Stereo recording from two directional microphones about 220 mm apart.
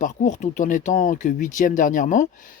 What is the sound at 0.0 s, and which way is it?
Speech, 35° left (ahead or behind).